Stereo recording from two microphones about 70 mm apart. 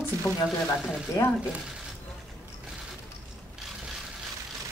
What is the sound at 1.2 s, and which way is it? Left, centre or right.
Speech, left.